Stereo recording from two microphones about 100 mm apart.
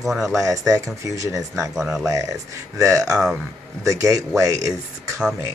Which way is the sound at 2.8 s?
30° right (ahead or behind).